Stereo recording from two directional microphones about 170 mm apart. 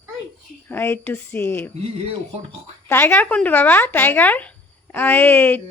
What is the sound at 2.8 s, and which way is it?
Speech, 10° left (ahead or behind).